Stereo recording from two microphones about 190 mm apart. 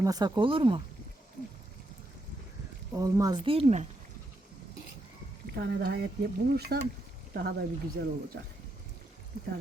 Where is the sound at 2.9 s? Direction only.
20° right (ahead or behind); by 3.8 s 35° right (ahead or behind).